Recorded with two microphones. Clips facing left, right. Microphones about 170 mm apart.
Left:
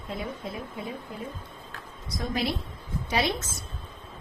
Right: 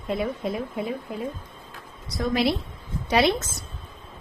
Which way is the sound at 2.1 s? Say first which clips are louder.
Right 6 dB; 80° right.